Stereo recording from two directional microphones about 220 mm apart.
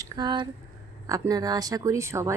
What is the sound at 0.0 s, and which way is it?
Speech, 20° right (ahead or behind).